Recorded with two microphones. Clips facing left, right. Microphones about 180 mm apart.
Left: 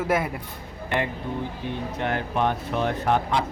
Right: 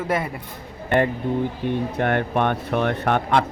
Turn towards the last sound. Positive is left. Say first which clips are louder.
# right 3 dB
turn(degrees=-60)  # may be behind; listen again after turning